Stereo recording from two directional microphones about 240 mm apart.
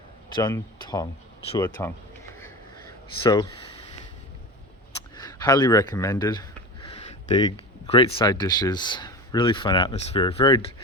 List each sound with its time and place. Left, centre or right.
0.3 s speech: centre
3.2 s speech: centre
5.1 s speech: centre